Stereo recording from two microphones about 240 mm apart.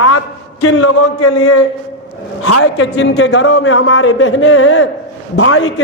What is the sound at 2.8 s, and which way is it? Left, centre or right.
A man's voice, left.